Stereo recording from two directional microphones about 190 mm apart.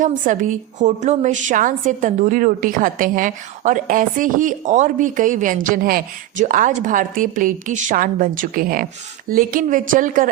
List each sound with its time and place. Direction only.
0.0 s a woman's voice: 45° right (ahead or behind)